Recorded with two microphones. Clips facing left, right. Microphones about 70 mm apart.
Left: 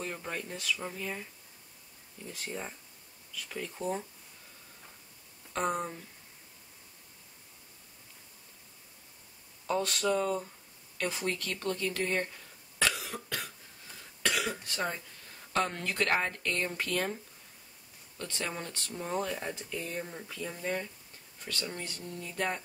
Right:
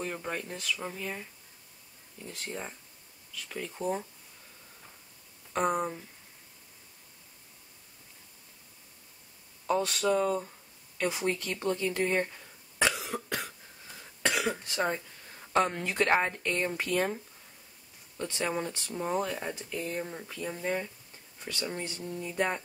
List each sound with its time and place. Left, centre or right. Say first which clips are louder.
0.0 s speech: right 3 dB; centre
2.2 s speech: right 1 dB; centre
5.5 s speech: right 3 dB; centre
9.7 s speech: right 2 dB; centre
12.7 s cough: right 3 dB; centre
14.4 s speech: right 4 dB; centre
15.5 s speech: right 4 dB; centre